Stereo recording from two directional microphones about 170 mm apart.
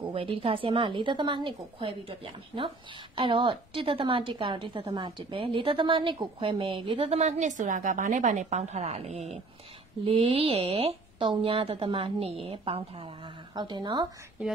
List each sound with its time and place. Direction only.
0.1 s a woman's voice: 35° right (ahead or behind)